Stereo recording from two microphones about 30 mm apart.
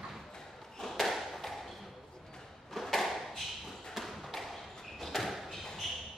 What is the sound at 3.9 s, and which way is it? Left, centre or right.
Tap, centre.